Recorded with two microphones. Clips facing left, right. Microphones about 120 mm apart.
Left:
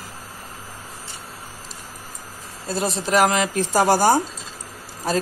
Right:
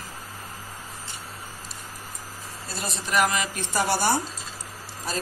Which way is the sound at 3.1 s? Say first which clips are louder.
Left 5 dB; 90° left.